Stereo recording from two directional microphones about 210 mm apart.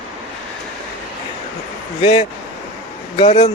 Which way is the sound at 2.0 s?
25° left (ahead or behind).